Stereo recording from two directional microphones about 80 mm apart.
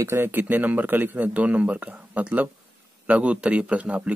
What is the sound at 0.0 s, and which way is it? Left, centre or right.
Speech, right.